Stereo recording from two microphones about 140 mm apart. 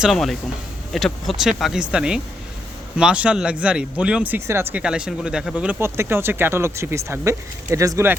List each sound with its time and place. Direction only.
0.0 s speech: centre (ahead or behind); by 4.8 s 20° right (ahead or behind)
4.8 s speech: 5° right (ahead or behind)
5.8 s speech: 15° right (ahead or behind)